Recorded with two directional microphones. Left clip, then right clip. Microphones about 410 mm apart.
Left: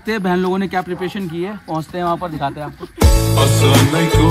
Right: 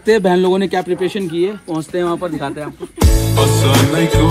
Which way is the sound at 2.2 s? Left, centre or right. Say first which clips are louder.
Right 1 dB; centre.